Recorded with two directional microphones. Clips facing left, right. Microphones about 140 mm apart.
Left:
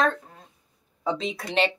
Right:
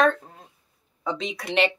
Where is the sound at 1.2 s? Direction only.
30° left (ahead or behind).